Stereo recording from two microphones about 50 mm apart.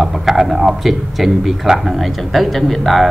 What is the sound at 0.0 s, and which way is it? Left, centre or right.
A man's voice, centre.